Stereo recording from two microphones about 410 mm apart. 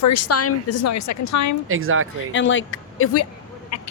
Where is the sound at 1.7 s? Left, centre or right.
Right.